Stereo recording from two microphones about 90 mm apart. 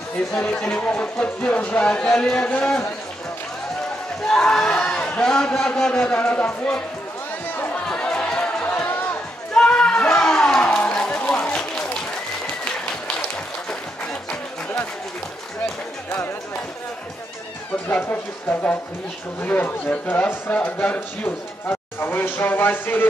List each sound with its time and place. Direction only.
0.4 s a man's voice: 10° left (ahead or behind)
4.3 s a man's voice: 5° left (ahead or behind)
7.5 s chatter: 20° left (ahead or behind)
9.6 s a sound: 10° left (ahead or behind)
15.6 s speech: 25° left (ahead or behind)
17.8 s speech: 20° left (ahead or behind)
19.4 s speech: 20° left (ahead or behind)